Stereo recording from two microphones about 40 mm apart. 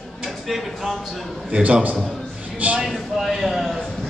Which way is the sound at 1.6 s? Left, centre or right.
Right.